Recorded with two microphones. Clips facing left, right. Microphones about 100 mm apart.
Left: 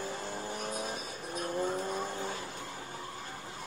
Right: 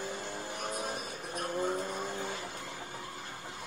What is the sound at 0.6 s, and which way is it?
Music, 50° right (ahead or behind).